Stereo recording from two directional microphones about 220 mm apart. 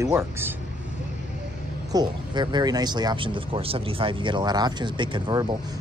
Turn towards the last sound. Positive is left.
turn(degrees=-20)  # may be behind; listen again after turning